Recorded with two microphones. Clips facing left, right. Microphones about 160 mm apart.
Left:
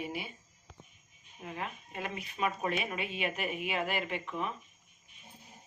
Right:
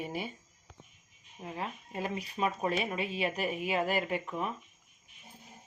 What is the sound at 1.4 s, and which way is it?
Speech, 30° right (ahead or behind).